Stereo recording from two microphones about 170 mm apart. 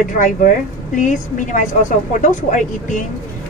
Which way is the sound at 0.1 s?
50° left (ahead or behind).